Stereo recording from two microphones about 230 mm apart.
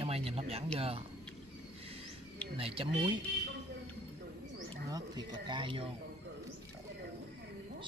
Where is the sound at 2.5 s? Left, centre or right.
Right.